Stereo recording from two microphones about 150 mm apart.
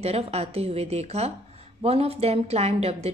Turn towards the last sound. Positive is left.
turn(degrees=-45)  # may be behind; listen again after turning